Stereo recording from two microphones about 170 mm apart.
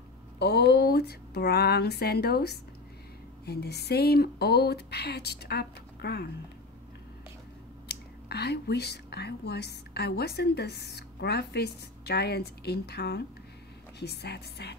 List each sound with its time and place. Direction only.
0.4 s speech: 75° left (ahead or behind)
7.9 s speech: 70° left (ahead or behind)